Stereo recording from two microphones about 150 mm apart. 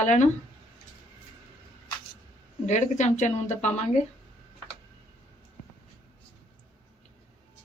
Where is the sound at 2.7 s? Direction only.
50° left (ahead or behind).